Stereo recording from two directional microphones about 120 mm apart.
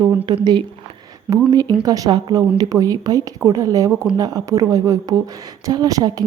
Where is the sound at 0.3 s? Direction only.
35° right (ahead or behind).